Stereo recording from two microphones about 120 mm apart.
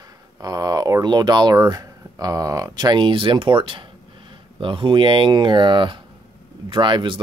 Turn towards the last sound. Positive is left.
turn(degrees=-40)  # may be behind; listen again after turning